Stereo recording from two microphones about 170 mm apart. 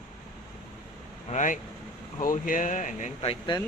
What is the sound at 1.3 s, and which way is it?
Speech, 50° left (ahead or behind).